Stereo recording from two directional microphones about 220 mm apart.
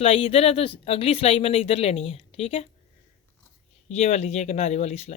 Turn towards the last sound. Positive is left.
turn(degrees=30)  # may be behind; listen again after turning